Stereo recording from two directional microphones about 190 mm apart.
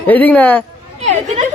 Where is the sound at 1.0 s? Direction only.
35° right (ahead or behind).